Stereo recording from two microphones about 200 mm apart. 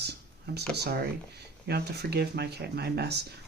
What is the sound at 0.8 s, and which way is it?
Speech, 50° right (ahead or behind).